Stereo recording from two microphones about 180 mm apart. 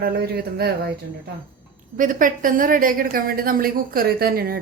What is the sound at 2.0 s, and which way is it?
A woman's voice, 45° right (ahead or behind).